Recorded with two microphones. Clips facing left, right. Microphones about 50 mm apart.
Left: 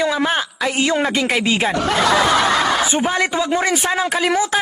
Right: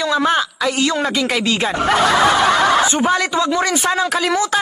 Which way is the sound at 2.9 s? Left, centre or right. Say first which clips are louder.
Right 2 dB; centre.